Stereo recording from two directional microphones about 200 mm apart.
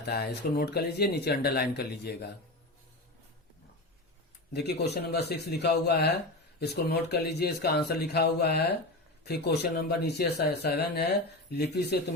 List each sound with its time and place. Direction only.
0.0 s speech: 55° left (ahead or behind)
4.5 s a man's voice: 55° left (ahead or behind)